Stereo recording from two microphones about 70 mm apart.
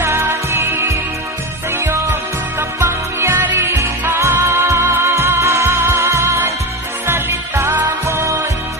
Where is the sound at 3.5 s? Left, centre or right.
Right.